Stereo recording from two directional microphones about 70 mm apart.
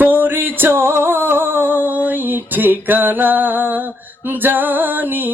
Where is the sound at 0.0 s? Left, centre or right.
Right.